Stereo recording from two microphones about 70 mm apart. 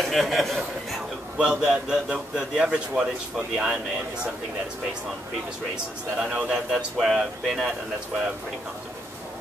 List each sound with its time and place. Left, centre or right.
0.0 s a man's voice: centre
6.1 s a man's voice: centre